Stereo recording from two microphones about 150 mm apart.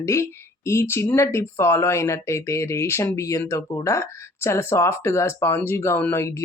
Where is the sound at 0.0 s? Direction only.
20° left (ahead or behind).